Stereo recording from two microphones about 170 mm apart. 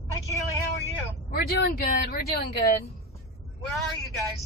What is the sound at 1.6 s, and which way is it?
Speech, 65° left (ahead or behind).